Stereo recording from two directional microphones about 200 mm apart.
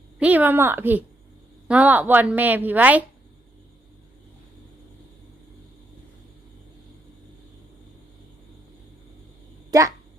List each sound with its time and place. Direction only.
0.2 s a woman's voice: 10° right (ahead or behind)
9.7 s speech: 15° right (ahead or behind)